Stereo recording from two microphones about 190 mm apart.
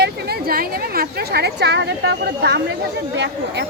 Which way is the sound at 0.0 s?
55° right (ahead or behind).